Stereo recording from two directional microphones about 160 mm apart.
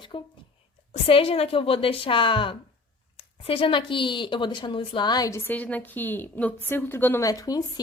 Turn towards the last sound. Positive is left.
turn(degrees=25)  # may be behind; listen again after turning